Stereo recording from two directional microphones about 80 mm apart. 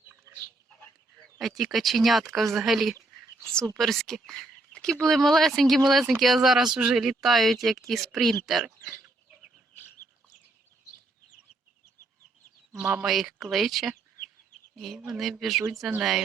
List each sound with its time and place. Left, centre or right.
1.4 s speech: centre
12.8 s speech: centre
13.1 s speech: centre